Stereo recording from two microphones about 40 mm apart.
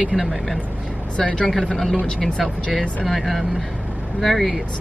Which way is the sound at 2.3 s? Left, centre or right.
Left.